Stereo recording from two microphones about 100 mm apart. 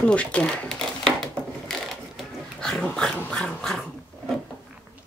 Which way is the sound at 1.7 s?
5° left (ahead or behind).